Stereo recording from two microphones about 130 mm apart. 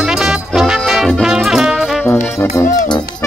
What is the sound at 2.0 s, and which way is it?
Music, 15° left (ahead or behind).